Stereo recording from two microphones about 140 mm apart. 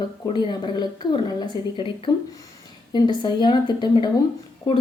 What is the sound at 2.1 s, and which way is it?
A woman's voice, 35° left (ahead or behind).